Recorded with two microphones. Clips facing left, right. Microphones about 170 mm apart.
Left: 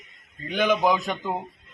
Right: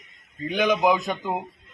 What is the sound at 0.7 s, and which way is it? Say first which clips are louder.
Speech: right 1 dB; 10° right (ahead or behind).